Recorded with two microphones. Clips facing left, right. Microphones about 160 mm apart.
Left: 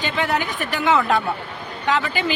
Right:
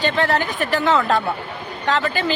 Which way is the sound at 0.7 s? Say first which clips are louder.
Even; 15° left (ahead or behind).